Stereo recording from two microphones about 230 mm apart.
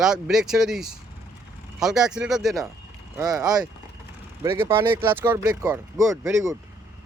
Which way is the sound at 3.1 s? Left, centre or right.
Centre.